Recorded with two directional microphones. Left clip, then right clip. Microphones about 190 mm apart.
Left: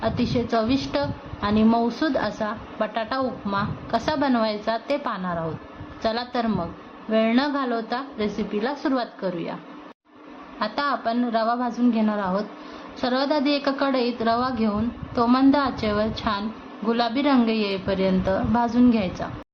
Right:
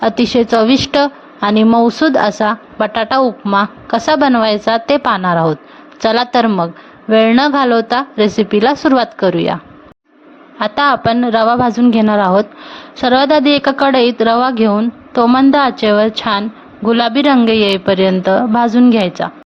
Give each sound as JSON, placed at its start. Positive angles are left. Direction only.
{"t": 0.0, "sound": "a woman's voice", "side_deg": -45}
{"t": 10.6, "sound": "a woman's voice", "side_deg": -45}